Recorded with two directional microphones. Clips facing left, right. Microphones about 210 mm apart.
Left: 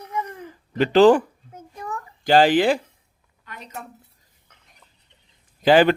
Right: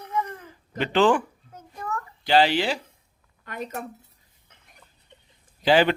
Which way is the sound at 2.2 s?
45° left (ahead or behind).